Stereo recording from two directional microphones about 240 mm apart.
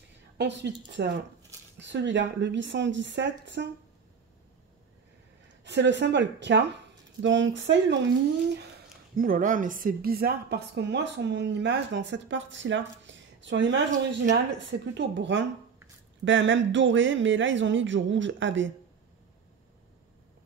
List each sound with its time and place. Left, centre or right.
0.4 s speech: right
5.6 s speech: right
9.1 s speech: right